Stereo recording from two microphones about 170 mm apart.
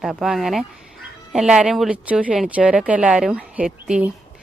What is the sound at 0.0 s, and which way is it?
Speech, centre (ahead or behind).